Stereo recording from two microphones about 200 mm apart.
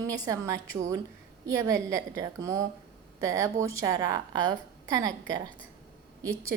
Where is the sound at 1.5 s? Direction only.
15° right (ahead or behind).